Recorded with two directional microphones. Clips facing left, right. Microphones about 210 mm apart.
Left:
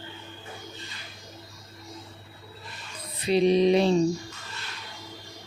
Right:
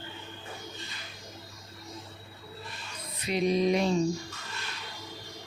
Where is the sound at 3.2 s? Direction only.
30° left (ahead or behind).